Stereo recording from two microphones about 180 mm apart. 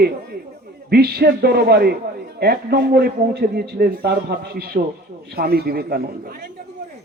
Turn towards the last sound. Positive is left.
turn(degrees=-55)  # may be behind; listen again after turning